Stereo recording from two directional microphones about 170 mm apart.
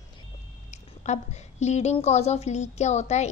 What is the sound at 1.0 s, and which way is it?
A woman's voice, 40° left (ahead or behind).